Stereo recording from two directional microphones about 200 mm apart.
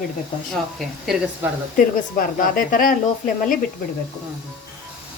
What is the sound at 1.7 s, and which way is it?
Speech, 45° left (ahead or behind).